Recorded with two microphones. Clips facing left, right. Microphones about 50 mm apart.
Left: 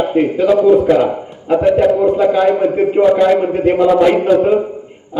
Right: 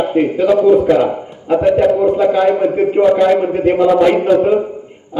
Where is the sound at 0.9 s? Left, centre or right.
Centre.